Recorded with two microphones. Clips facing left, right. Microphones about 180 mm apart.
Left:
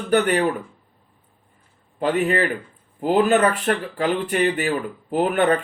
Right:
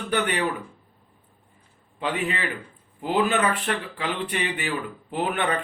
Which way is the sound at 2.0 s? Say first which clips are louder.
Left 7 dB; 45° left (ahead or behind).